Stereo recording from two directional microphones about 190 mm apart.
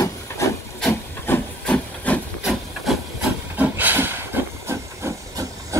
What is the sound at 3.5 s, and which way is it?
Hiss, 10° right (ahead or behind).